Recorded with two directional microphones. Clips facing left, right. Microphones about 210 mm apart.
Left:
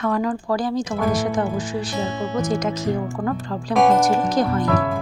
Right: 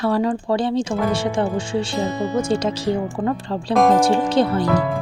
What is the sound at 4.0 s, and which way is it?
Speech, 30° right (ahead or behind).